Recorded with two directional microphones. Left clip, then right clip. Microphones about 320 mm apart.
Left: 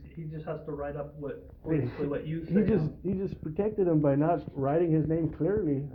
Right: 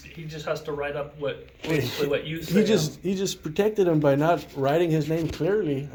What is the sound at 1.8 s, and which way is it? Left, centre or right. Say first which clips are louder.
Speech: right 7 dB; centre.